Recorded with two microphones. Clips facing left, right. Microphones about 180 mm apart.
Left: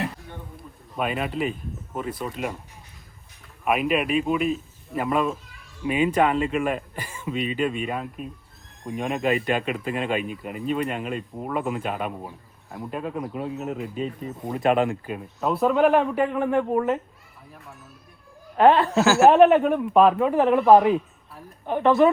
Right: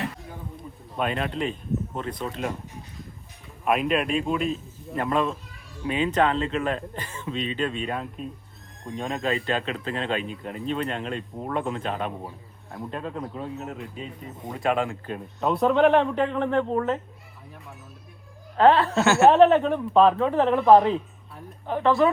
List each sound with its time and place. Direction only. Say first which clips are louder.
0.9 s speech: left 1 dB; 5° left (ahead or behind)
3.6 s speech: left 1 dB; 5° left (ahead or behind); by 14.9 s 20° left (ahead or behind)
15.0 s speech: even; 5° left (ahead or behind)
18.5 s speech: left 1 dB; 15° left (ahead or behind)
18.9 s speech: left 1 dB; centre (ahead or behind)
19.3 s speech: left 1 dB; 15° left (ahead or behind)